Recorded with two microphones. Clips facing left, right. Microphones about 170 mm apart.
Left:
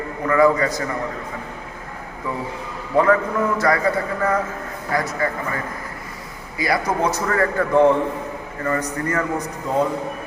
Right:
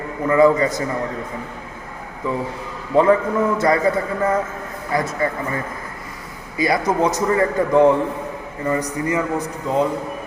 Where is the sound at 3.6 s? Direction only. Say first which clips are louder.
Right 2 dB; 25° right (ahead or behind).